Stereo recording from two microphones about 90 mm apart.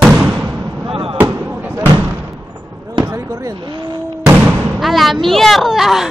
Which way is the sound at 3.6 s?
60° right (ahead or behind).